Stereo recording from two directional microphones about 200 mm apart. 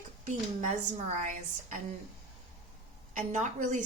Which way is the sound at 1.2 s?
40° right (ahead or behind).